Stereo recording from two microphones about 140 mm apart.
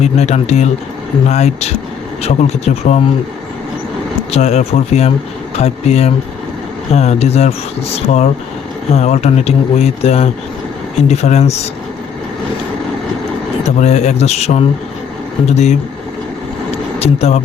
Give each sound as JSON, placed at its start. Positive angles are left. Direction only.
{"t": 0.0, "sound": "speech", "side_deg": 50}
{"t": 4.3, "sound": "speech", "side_deg": 50}
{"t": 13.7, "sound": "speech", "side_deg": 55}
{"t": 16.7, "sound": "vehicle", "side_deg": 50}